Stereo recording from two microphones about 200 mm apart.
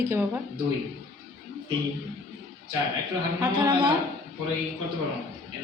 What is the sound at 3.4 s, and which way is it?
Speech, 20° right (ahead or behind).